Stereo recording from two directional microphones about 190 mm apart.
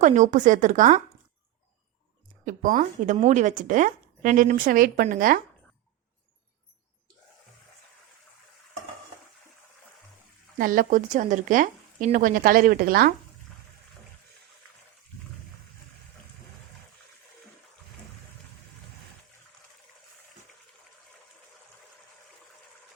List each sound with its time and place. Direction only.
0.0 s a woman's voice: 40° right (ahead or behind)
2.4 s speech: 45° right (ahead or behind)
10.6 s speech: 45° right (ahead or behind)